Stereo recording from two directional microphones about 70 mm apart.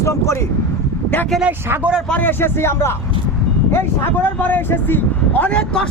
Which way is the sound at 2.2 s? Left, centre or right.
Left.